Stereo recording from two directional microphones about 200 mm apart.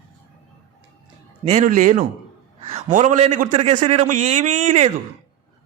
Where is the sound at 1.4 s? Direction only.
35° right (ahead or behind).